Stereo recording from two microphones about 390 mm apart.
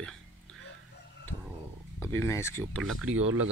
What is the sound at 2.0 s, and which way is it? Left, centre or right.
Speech, centre.